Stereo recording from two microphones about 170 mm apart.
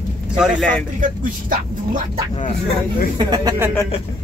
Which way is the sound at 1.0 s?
50° right (ahead or behind).